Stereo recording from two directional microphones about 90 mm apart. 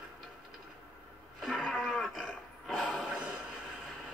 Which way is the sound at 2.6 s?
Centre (ahead or behind).